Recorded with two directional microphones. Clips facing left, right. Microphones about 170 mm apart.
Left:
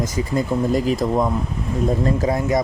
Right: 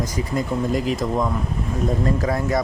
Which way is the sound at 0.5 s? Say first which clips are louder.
Left 3 dB; 25° left (ahead or behind).